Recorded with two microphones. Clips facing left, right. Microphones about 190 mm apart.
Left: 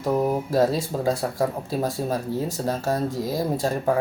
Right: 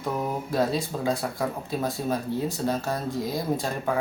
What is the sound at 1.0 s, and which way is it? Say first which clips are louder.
Speech: left 5 dB; 40° left (ahead or behind).